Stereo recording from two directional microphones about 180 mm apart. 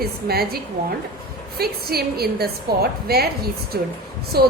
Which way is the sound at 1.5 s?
60° right (ahead or behind).